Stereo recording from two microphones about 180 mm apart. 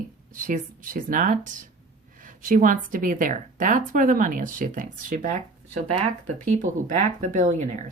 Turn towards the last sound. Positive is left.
turn(degrees=-45)  # may be behind; listen again after turning